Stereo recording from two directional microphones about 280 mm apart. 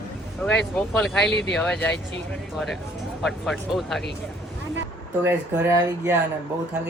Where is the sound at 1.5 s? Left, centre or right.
Centre.